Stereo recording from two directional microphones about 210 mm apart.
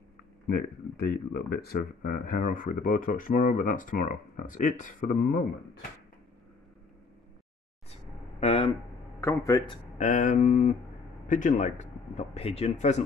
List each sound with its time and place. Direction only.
0.5 s speech: 45° left (ahead or behind)
8.4 s speech: 30° left (ahead or behind)
9.2 s speech: 15° left (ahead or behind)
9.9 s speech: 35° left (ahead or behind)